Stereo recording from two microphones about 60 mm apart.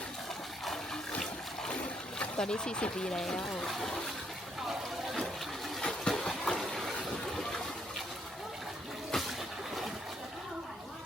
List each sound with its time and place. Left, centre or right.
1.7 s boat: left
2.4 s speech: centre
5.8 s a sound: centre
9.1 s water: centre